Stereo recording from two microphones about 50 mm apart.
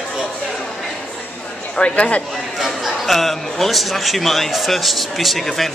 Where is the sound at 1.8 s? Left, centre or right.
Left.